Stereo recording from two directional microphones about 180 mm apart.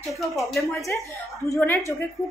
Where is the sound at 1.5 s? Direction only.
10° left (ahead or behind).